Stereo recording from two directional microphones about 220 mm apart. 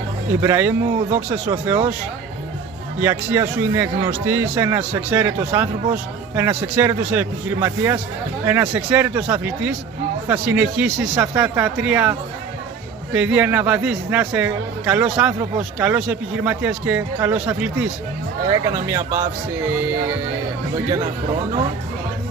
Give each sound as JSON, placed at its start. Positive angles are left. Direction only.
{"t": 0.4, "sound": "speech", "side_deg": -10}
{"t": 3.0, "sound": "a man's voice", "side_deg": -10}